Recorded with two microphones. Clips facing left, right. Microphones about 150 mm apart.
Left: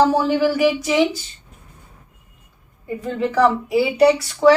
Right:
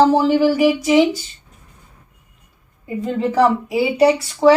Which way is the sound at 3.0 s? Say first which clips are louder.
Right 2 dB; 15° right (ahead or behind).